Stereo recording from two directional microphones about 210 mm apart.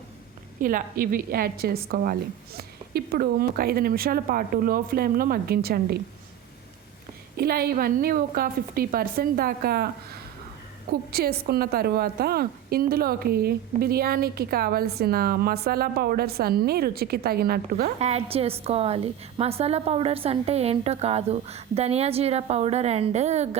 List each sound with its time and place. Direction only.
0.6 s a woman's voice: 40° right (ahead or behind)
7.3 s a woman's voice: 45° right (ahead or behind)
11.1 s a woman's voice: 50° right (ahead or behind)
18.0 s a woman's voice: 30° right (ahead or behind)